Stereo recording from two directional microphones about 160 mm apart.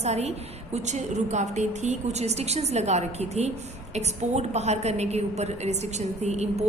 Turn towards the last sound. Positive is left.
turn(degrees=-45)  # may be behind; listen again after turning